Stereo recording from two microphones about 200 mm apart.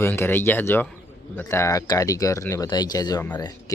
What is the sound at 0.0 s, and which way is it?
Speech, 10° left (ahead or behind).